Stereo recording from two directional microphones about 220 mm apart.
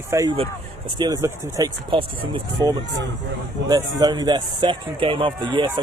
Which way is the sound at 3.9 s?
20° right (ahead or behind).